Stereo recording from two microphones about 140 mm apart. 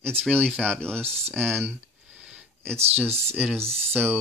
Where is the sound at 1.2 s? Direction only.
15° right (ahead or behind).